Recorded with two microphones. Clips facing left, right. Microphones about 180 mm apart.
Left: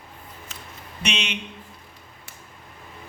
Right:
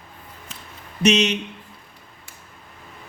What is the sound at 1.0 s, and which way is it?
Speech, 40° right (ahead or behind).